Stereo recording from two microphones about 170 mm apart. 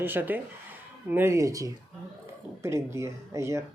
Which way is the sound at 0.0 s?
10° right (ahead or behind).